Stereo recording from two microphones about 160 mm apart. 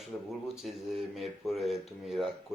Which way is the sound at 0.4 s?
Centre (ahead or behind).